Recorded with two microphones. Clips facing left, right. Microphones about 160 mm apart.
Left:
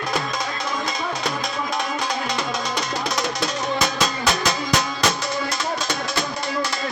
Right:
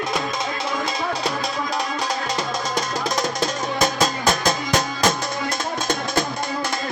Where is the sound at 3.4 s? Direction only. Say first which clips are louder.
Right 1 dB; 45° right (ahead or behind).